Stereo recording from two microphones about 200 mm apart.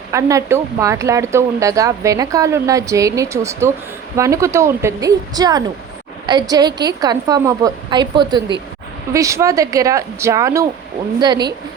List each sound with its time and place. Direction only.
0.1 s a woman's voice: 15° right (ahead or behind)